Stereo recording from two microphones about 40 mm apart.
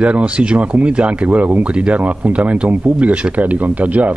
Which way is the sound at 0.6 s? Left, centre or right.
Right.